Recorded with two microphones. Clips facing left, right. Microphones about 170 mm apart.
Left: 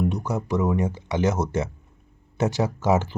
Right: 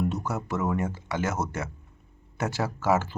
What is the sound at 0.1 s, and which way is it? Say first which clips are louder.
Speech: left 4 dB; 15° left (ahead or behind).